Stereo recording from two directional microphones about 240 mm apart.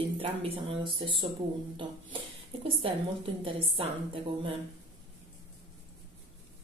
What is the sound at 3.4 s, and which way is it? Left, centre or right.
A woman's voice, right.